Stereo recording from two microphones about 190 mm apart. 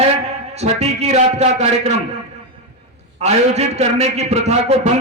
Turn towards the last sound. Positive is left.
turn(degrees=-35)  # may be behind; listen again after turning